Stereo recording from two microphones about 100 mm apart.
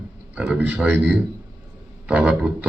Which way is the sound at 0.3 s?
10° right (ahead or behind).